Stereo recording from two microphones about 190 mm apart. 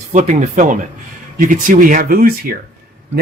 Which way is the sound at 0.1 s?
40° right (ahead or behind).